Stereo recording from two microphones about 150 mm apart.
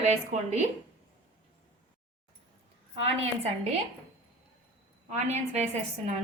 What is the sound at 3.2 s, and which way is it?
Speech, 45° right (ahead or behind).